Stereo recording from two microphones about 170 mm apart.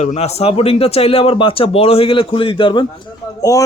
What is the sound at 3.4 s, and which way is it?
Speech, 20° left (ahead or behind).